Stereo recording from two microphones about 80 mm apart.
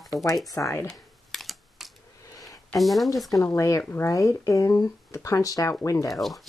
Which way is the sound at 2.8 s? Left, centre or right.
Centre.